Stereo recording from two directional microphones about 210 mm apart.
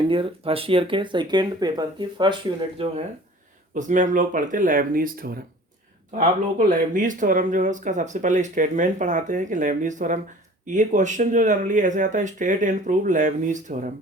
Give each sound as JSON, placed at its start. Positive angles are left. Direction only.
{"t": 0.1, "sound": "speech", "side_deg": -25}
{"t": 3.8, "sound": "speech", "side_deg": -35}
{"t": 6.7, "sound": "speech", "side_deg": -40}